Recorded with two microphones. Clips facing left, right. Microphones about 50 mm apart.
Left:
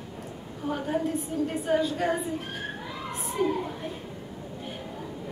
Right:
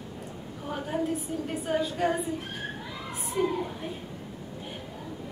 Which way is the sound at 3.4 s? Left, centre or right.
Centre.